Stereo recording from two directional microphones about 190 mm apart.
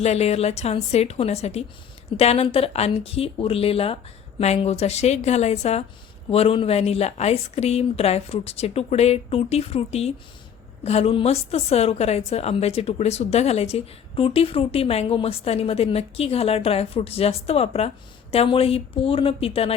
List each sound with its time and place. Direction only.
0.0 s a woman's voice: 35° left (ahead or behind)